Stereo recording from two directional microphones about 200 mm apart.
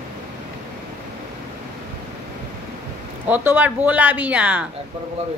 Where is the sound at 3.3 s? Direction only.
10° right (ahead or behind).